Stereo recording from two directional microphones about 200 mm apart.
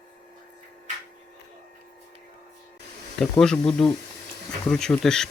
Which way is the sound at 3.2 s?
Centre (ahead or behind).